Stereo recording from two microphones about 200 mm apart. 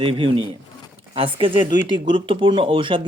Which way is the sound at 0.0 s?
25° right (ahead or behind).